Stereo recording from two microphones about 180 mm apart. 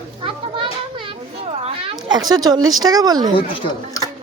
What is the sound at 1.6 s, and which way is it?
Speech, 25° right (ahead or behind).